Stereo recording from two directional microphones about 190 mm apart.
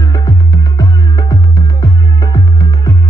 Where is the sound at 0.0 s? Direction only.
20° left (ahead or behind).